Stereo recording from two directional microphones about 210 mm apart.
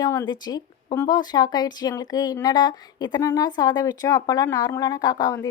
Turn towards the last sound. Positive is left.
turn(degrees=20)  # may be behind; listen again after turning